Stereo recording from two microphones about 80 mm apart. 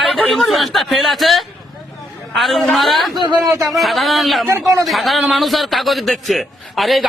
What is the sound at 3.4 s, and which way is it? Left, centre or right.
Speech, right.